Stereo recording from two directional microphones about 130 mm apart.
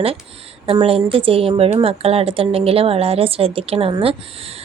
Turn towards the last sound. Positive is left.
turn(degrees=-45)  # may be behind; listen again after turning